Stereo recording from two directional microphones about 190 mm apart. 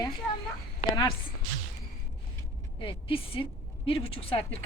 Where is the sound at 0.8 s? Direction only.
20° left (ahead or behind).